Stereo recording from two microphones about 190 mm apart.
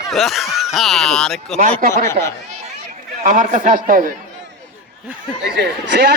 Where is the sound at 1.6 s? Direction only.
45° right (ahead or behind).